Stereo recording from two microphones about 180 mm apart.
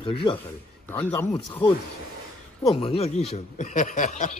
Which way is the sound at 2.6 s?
35° left (ahead or behind).